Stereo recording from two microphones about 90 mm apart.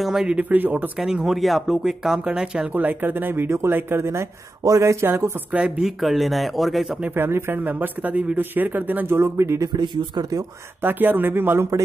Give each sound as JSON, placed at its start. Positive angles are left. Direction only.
{"t": 0.0, "sound": "speech", "side_deg": -5}
{"t": 0.9, "sound": "speech", "side_deg": -5}
{"t": 2.7, "sound": "speech", "side_deg": -20}
{"t": 5.5, "sound": "speech", "side_deg": -10}
{"t": 7.0, "sound": "speech", "side_deg": -25}
{"t": 9.6, "sound": "speech", "side_deg": -55}
{"t": 10.8, "sound": "speech", "side_deg": -20}